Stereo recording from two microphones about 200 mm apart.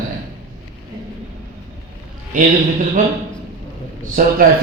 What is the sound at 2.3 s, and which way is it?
Speech, 40° right (ahead or behind).